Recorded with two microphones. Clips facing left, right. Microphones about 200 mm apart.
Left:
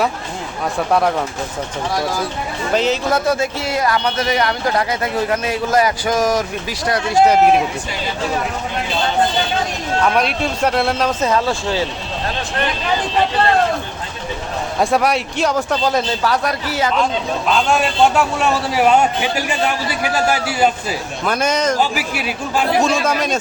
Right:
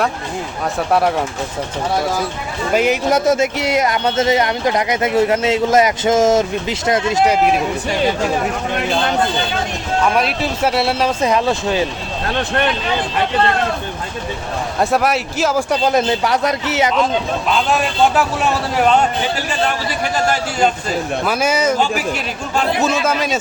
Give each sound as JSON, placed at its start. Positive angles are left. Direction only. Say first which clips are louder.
{"t": 0.9, "sound": "a man's voice", "louder": "right 1 dB", "side_deg": -5}
{"t": 2.7, "sound": "speech", "louder": "right 2 dB", "side_deg": -10}
{"t": 10.2, "sound": "speech", "louder": "even", "side_deg": -5}
{"t": 12.3, "sound": "speech", "louder": "right 7 dB", "side_deg": -60}
{"t": 14.8, "sound": "a man's voice", "louder": "even", "side_deg": 0}
{"t": 15.7, "sound": "speech", "louder": "right 3 dB", "side_deg": -20}
{"t": 17.5, "sound": "a man's voice", "louder": "left 1 dB", "side_deg": 0}
{"t": 21.2, "sound": "speech", "louder": "left 1 dB", "side_deg": -5}
{"t": 21.8, "sound": "speech", "louder": "right 1 dB", "side_deg": 10}
{"t": 22.8, "sound": "a man's voice", "louder": "even", "side_deg": -5}